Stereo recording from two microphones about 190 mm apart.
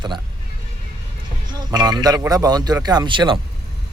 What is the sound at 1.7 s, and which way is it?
Speech, 20° right (ahead or behind).